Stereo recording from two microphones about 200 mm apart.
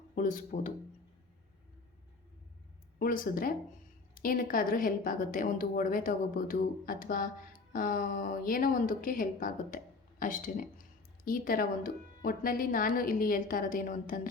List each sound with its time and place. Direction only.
0.2 s speech: 40° left (ahead or behind)
3.0 s a woman's voice: 45° left (ahead or behind)